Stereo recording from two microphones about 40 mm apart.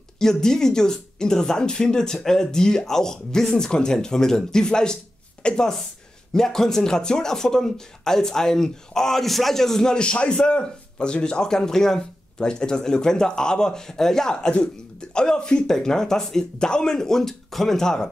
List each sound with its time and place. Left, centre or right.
0.2 s speech: centre
6.3 s speech: centre